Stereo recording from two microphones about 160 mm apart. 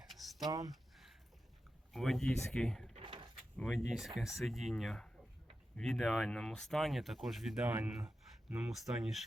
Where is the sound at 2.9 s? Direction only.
30° right (ahead or behind).